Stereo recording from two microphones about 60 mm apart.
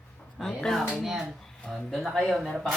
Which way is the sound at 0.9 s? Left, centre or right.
Centre.